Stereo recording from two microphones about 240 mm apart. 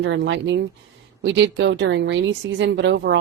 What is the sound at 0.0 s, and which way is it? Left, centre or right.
Speech, right.